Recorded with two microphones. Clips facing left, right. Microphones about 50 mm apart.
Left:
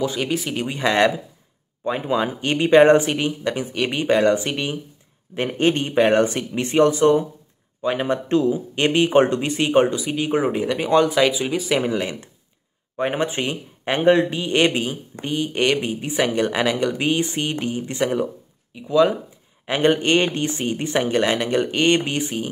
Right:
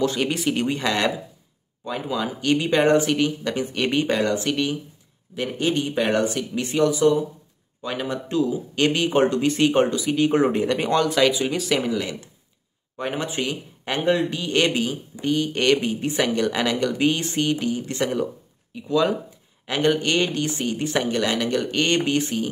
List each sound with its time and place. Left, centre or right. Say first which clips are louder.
0.0 s speech: right 1 dB; centre
0.8 s speech: left 5 dB; left
3.6 s speech: right 1 dB; centre
4.0 s speech: left 9 dB; left
5.3 s speech: left 4 dB; left
7.8 s speech: left 6 dB; left
8.3 s speech: left 3 dB; left
8.7 s speech: left 3 dB; left
9.5 s speech: left 1 dB; centre
10.9 s speech: left 4 dB; centre
11.8 s speech: left 2 dB; left
17.9 s speech: left 2 dB; centre
19.6 s speech: left 3 dB; left